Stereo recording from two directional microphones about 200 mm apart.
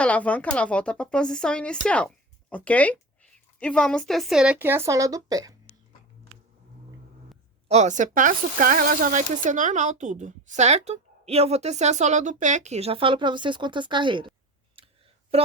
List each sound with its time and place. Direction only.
0.0 s a woman's voice: 5° left (ahead or behind); by 5.5 s 20° right (ahead or behind)
7.7 s speech: 35° right (ahead or behind)
14.8 s clicking: 30° right (ahead or behind)
15.3 s speech: 30° right (ahead or behind)